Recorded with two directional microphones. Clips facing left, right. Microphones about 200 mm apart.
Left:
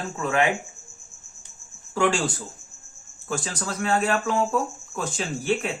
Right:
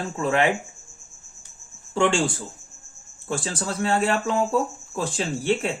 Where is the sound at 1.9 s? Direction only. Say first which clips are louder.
Right 1 dB; 25° right (ahead or behind).